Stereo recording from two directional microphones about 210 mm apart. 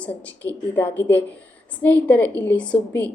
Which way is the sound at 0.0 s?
10° left (ahead or behind).